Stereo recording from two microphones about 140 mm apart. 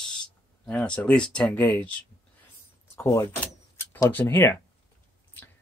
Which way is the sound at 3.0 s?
20° left (ahead or behind).